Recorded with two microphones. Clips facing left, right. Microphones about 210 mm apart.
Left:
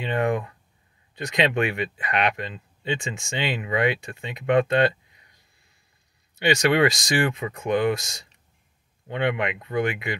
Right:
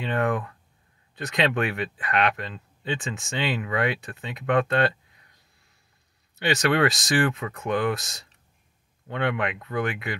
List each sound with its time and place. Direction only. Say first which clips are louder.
0.0 s speech: left 1 dB; 15° left (ahead or behind)
6.4 s speech: left 2 dB; 15° left (ahead or behind)